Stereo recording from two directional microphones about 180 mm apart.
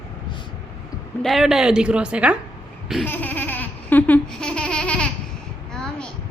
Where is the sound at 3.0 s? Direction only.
10° left (ahead or behind).